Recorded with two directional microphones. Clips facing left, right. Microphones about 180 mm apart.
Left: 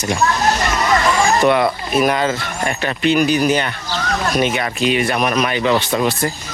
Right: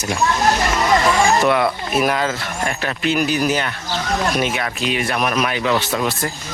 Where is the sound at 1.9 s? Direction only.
5° right (ahead or behind).